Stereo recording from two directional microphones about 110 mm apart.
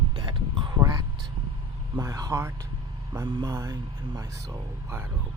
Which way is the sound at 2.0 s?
30° right (ahead or behind).